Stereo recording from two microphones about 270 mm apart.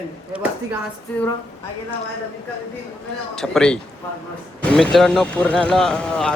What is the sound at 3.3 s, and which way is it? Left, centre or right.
Speech, centre.